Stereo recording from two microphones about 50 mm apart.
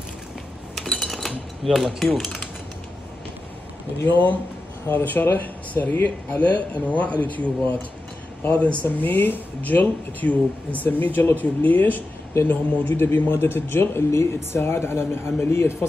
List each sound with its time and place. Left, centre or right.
1.0 s cutlery: centre
1.6 s speech: centre
2.1 s a sound: centre
4.0 s speech: left
8.8 s a man's voice: left